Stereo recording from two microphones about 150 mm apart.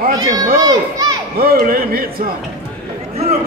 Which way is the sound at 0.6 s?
25° right (ahead or behind).